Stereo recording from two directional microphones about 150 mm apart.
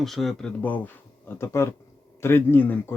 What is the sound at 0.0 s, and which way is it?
Speech, centre (ahead or behind).